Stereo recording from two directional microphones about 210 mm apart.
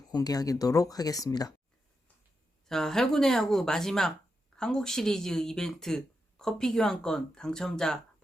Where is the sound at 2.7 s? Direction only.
Centre (ahead or behind).